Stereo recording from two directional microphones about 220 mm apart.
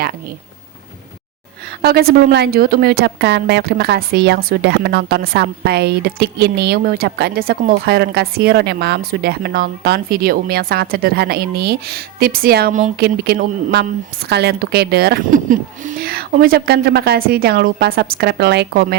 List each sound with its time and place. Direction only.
1.8 s a woman's voice: 45° right (ahead or behind)